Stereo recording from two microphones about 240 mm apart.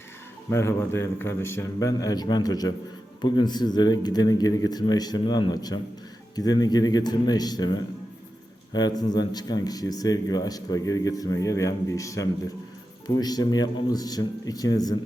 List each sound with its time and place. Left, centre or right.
0.5 s speech: centre